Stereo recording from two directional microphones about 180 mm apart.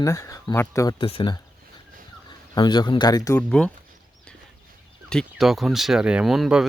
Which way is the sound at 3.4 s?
5° left (ahead or behind).